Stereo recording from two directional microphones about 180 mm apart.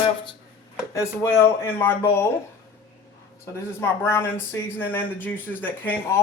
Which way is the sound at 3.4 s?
15° left (ahead or behind).